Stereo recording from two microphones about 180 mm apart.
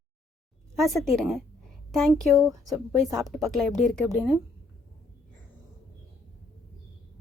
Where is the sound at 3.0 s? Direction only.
20° right (ahead or behind).